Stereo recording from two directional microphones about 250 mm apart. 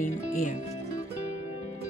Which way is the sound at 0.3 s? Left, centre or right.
Left.